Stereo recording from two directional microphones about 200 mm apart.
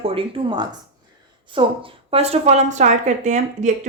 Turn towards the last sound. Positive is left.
turn(degrees=-35)  # may be behind; listen again after turning